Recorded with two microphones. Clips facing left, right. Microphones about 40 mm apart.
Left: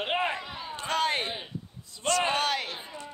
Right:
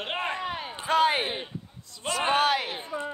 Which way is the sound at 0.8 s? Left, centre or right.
Centre.